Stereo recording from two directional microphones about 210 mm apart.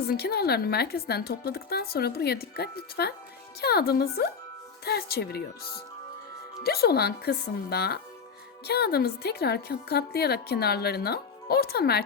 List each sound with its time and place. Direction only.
0.0 s a woman's voice: 50° left (ahead or behind)